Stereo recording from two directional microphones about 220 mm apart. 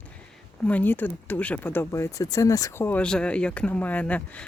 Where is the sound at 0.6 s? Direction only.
10° left (ahead or behind).